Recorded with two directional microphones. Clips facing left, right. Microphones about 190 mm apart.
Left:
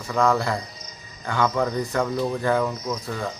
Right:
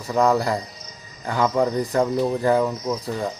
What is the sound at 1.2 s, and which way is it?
Speech, 35° right (ahead or behind).